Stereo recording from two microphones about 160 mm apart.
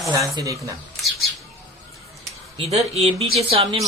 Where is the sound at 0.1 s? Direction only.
20° right (ahead or behind).